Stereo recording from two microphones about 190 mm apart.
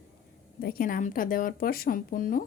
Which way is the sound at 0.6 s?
55° left (ahead or behind).